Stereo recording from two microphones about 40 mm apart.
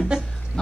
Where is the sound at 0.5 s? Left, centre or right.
Centre.